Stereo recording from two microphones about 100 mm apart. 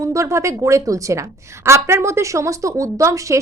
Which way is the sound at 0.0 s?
30° right (ahead or behind).